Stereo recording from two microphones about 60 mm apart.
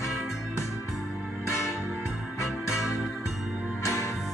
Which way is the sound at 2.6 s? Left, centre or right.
Left.